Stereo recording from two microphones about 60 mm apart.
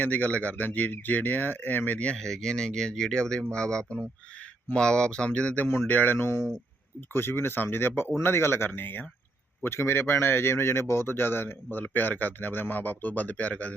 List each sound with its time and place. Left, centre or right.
0.0 s speech: left
2.1 s speech: centre; by 6.1 s left
6.1 s speech: left
9.6 s speech: left